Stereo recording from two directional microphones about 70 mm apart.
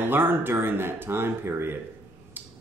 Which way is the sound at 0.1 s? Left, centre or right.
Right.